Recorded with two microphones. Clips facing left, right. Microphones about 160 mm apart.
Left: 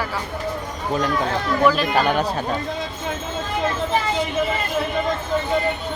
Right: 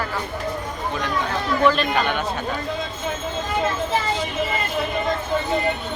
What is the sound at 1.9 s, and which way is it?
Speech, 35° left (ahead or behind).